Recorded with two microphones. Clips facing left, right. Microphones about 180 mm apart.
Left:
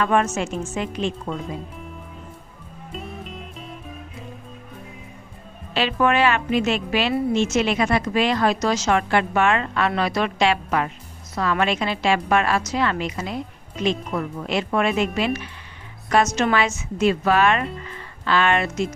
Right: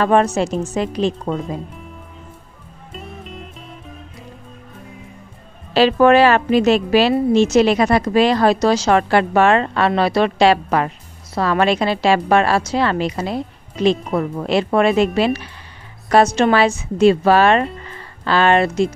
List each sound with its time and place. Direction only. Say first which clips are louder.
0.0 s a woman's voice: right 5 dB; 35° right (ahead or behind)
2.9 s music: even; centre (ahead or behind)
5.7 s a woman's voice: right 9 dB; 35° right (ahead or behind)